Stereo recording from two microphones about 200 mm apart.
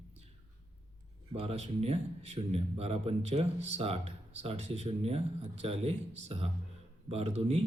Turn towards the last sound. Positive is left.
turn(degrees=-30)  # may be behind; listen again after turning